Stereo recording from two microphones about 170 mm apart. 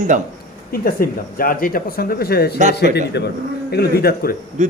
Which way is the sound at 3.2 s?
85° left.